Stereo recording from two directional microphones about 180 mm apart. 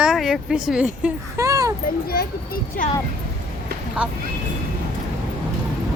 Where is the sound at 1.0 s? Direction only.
15° right (ahead or behind).